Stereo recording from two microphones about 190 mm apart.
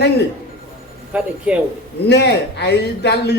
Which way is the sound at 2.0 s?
60° left (ahead or behind).